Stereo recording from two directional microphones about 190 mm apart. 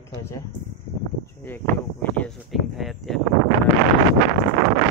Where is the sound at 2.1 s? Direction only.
Centre (ahead or behind).